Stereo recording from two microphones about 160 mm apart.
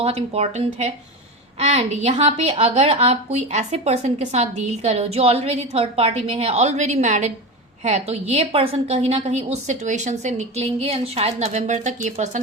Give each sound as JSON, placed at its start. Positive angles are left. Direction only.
{"t": 0.0, "sound": "a woman's voice", "side_deg": -40}